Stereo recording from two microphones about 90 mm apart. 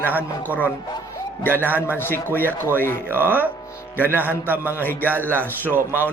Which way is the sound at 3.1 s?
25° right (ahead or behind).